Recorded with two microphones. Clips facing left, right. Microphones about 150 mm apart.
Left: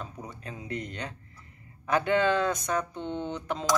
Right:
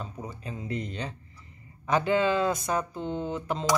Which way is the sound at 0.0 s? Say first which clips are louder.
Right 2 dB; centre (ahead or behind).